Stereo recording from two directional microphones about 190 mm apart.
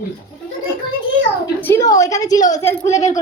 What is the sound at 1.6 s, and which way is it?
A woman's voice, 15° left (ahead or behind).